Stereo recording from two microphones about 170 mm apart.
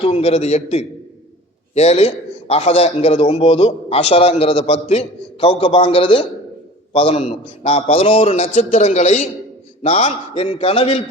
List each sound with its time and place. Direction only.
0.0 s a man's voice: 35° left (ahead or behind)